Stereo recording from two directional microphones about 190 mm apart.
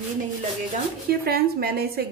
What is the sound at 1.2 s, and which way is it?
Speech, 55° right (ahead or behind).